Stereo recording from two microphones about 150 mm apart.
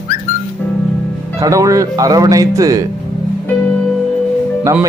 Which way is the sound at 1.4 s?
20° right (ahead or behind).